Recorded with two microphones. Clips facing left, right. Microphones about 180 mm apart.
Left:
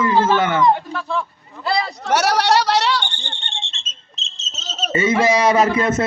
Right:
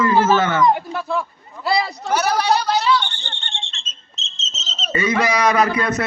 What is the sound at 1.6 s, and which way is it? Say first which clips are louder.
Speech: right 1 dB; 5° right (ahead or behind).